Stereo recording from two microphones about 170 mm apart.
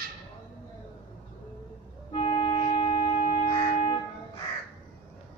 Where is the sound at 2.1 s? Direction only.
35° left (ahead or behind).